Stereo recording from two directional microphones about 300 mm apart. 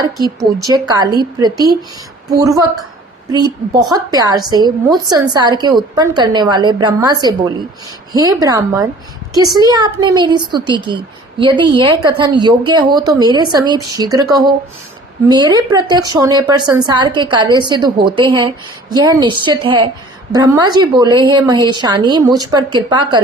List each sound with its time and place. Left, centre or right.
0.0 s a woman's voice: centre